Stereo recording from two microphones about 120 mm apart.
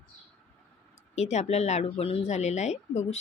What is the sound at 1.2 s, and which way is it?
A woman's voice, 70° left (ahead or behind).